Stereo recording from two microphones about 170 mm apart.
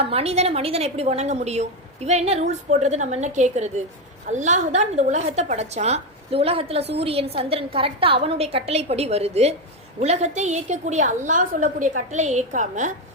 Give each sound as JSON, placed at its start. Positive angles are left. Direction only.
{"t": 0.0, "sound": "a woman's voice", "side_deg": -35}